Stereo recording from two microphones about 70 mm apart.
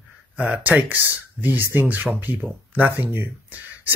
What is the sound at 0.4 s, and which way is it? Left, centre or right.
Speech, right.